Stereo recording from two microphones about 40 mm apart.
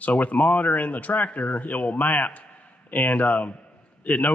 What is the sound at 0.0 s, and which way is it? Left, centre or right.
A man's voice, left.